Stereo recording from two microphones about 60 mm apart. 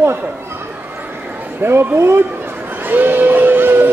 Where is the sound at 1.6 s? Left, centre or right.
Right.